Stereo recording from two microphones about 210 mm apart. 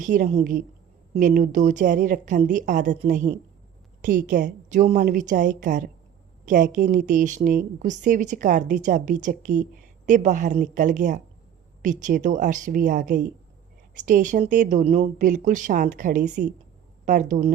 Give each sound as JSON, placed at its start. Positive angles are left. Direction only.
{"t": 0.0, "sound": "speech", "side_deg": -40}